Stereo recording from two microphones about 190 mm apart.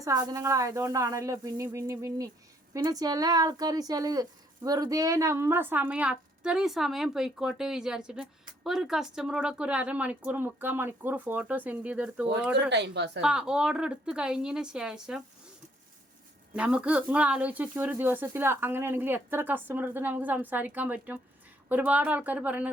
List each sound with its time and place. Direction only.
0.0 s speech: 20° right (ahead or behind); by 12.7 s 5° right (ahead or behind)
12.7 s a woman's voice: 65° right (ahead or behind)
13.2 s speech: 5° right (ahead or behind)
16.6 s speech: 5° right (ahead or behind)